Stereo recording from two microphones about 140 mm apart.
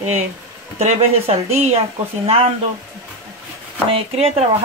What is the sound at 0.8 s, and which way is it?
Speech, 50° right (ahead or behind).